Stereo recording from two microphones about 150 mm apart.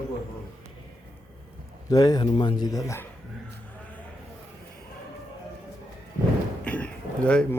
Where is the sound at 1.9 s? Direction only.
25° left (ahead or behind).